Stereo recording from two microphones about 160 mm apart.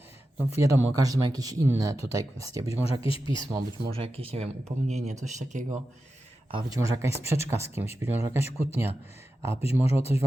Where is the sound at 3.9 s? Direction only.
35° right (ahead or behind).